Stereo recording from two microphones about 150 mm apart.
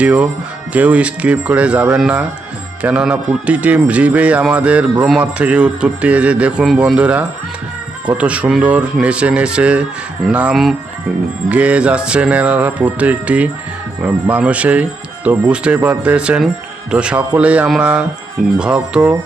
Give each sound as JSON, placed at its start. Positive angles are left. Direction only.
{"t": 0.0, "sound": "speech", "side_deg": -10}